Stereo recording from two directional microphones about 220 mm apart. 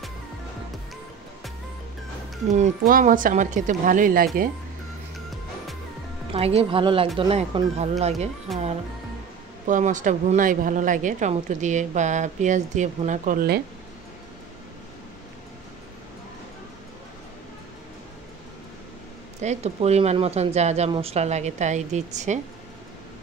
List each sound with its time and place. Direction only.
2.5 s speech: 35° right (ahead or behind)
6.3 s a woman's voice: 25° right (ahead or behind)
8.5 s speech: centre (ahead or behind)
9.7 s speech: 35° right (ahead or behind)
19.4 s a woman's voice: 30° right (ahead or behind)